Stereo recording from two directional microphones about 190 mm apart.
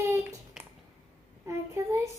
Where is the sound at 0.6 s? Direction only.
5° right (ahead or behind).